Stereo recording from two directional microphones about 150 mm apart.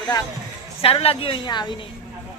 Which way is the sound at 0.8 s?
40° left (ahead or behind).